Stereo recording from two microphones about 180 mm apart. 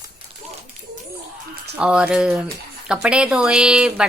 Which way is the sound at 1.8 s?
5° right (ahead or behind).